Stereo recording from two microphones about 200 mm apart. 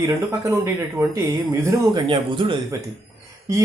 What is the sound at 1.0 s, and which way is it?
Speech, 15° right (ahead or behind).